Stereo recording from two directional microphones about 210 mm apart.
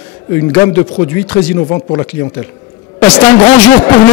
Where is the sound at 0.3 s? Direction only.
10° left (ahead or behind).